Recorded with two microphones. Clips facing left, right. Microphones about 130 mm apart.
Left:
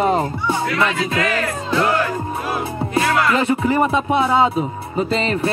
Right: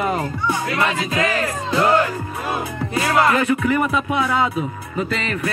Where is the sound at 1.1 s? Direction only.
25° right (ahead or behind).